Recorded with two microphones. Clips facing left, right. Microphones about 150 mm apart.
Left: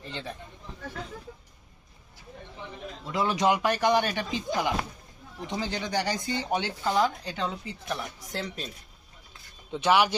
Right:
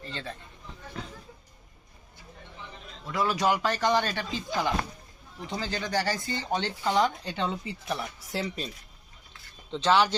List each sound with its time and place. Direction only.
0.0 s speech: 15° left (ahead or behind)
3.1 s speech: 20° left (ahead or behind); by 8.7 s centre (ahead or behind)
9.7 s speech: 10° left (ahead or behind)